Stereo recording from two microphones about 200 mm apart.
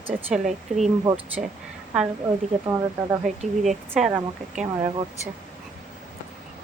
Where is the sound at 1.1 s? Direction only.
20° right (ahead or behind).